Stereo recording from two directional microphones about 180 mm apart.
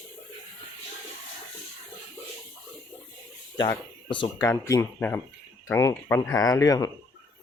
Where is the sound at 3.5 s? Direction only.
25° left (ahead or behind).